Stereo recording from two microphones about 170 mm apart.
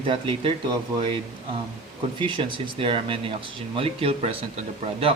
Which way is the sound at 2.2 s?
30° right (ahead or behind).